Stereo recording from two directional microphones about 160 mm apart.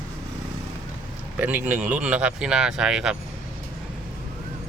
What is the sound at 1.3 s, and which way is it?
Speech, 10° right (ahead or behind).